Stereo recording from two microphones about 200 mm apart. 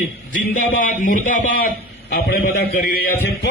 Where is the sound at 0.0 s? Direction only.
45° left (ahead or behind).